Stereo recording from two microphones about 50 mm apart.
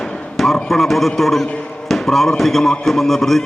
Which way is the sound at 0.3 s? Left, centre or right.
Centre.